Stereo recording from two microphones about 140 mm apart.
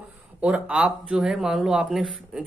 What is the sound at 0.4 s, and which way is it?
Speech, 5° right (ahead or behind).